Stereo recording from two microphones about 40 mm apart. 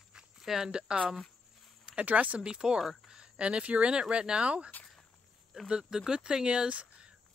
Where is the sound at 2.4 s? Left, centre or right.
Right.